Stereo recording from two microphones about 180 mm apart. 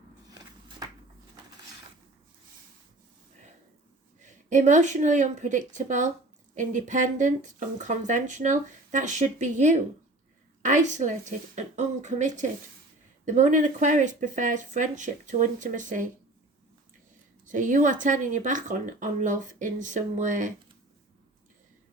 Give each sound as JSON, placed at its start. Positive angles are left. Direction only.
{"t": 0.3, "sound": "walk", "side_deg": -20}
{"t": 4.2, "sound": "speech", "side_deg": -45}
{"t": 17.4, "sound": "speech", "side_deg": -45}